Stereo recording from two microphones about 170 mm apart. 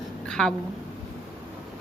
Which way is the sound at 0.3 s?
5° left (ahead or behind).